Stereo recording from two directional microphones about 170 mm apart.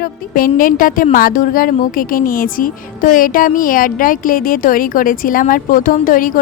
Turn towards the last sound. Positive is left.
turn(degrees=55)  # may be behind; listen again after turning